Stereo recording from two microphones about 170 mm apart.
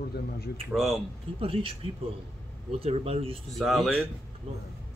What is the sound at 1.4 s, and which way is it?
Speech, 30° right (ahead or behind).